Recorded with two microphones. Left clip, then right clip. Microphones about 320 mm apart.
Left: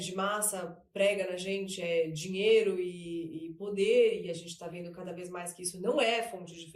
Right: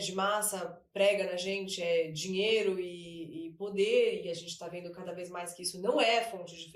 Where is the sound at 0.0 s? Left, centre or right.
Centre.